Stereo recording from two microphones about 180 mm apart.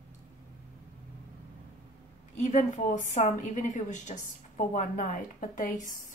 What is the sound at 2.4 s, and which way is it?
A woman's voice, 45° left (ahead or behind).